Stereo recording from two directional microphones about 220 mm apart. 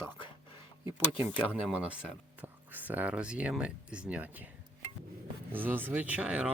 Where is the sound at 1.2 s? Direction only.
5° right (ahead or behind).